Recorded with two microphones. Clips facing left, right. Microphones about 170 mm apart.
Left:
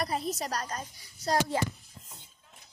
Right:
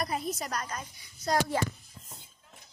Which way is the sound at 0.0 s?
30° left (ahead or behind).